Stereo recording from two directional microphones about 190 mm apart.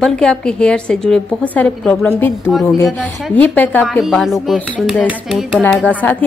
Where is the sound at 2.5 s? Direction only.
Centre (ahead or behind).